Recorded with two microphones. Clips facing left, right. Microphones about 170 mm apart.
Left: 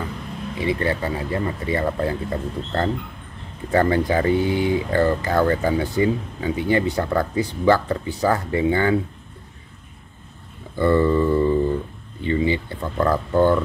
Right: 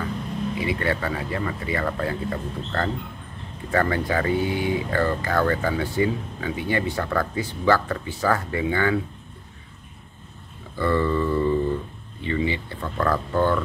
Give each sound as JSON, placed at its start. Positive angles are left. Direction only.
{"t": 0.6, "sound": "speech", "side_deg": 30}
{"t": 10.8, "sound": "a sound", "side_deg": 25}
{"t": 12.3, "sound": "speech", "side_deg": 30}